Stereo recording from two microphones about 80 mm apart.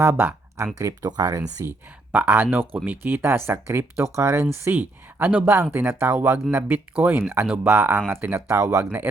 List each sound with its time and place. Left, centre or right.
0.0 s speech: right
0.3 s a sound: right
1.0 s speech: right
1.6 s speech: right
2.1 s speech: right
8.4 s speech: right